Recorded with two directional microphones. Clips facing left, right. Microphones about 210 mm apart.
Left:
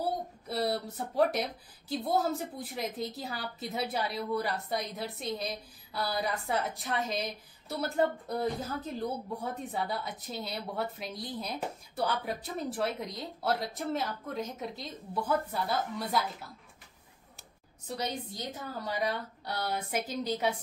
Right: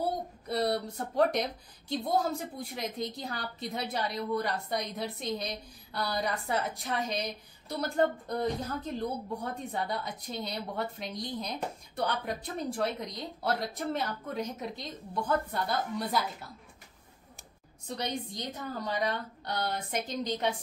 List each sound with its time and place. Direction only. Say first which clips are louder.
0.5 s a woman's voice: right 2 dB; 5° left (ahead or behind)
17.8 s a woman's voice: right 1 dB; 5° left (ahead or behind)